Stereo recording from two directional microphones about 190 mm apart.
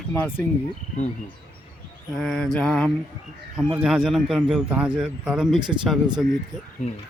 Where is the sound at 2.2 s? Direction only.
Centre (ahead or behind).